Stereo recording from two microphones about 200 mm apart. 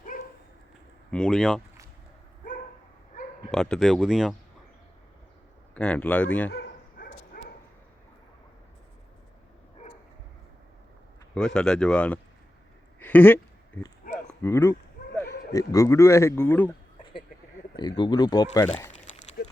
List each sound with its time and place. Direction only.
0.1 s dog: 45° left (ahead or behind)
1.1 s speech: centre (ahead or behind)
3.5 s speech: centre (ahead or behind)
5.7 s speech: 5° left (ahead or behind)
6.5 s dog: 50° left (ahead or behind)
11.3 s speech: 5° left (ahead or behind)
13.0 s a sound: 10° left (ahead or behind)
15.5 s speech: 15° left (ahead or behind)
17.7 s speech: 20° left (ahead or behind)
19.4 s a sound: 55° left (ahead or behind)